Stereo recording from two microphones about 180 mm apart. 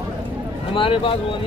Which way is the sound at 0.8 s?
30° left (ahead or behind).